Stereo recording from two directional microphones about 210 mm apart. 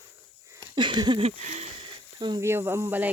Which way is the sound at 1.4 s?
35° right (ahead or behind).